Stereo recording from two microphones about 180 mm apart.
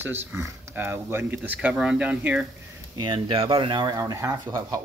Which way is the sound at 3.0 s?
25° right (ahead or behind).